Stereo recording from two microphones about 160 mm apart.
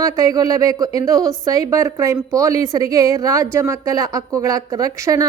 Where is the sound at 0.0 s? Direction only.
25° right (ahead or behind).